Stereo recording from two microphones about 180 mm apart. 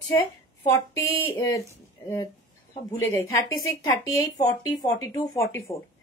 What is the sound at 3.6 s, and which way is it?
Speech, 20° left (ahead or behind).